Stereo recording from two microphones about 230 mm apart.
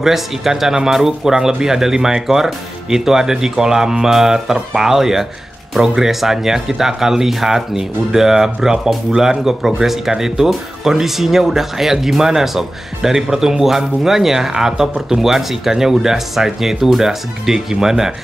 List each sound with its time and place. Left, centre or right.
0.0 s speech: centre